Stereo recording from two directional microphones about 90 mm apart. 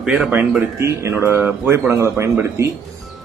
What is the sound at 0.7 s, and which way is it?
A man's voice, 30° right (ahead or behind).